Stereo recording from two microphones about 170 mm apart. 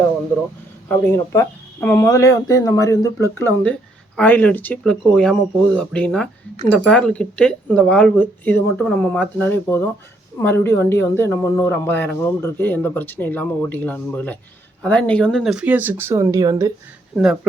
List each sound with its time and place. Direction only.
0.9 s speech: 15° left (ahead or behind); by 16.7 s 20° right (ahead or behind)